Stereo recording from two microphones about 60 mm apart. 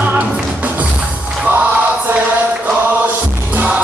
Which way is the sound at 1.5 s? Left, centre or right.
Right.